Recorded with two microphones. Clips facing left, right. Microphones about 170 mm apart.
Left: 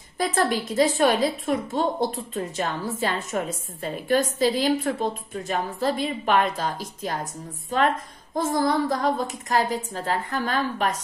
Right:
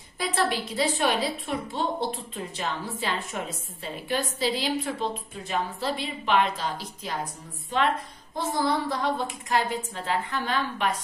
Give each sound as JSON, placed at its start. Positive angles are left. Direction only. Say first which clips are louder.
{"t": 0.2, "sound": "a woman's voice", "louder": "left 4 dB", "side_deg": 45}